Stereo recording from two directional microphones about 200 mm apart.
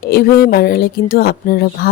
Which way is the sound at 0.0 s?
50° left (ahead or behind).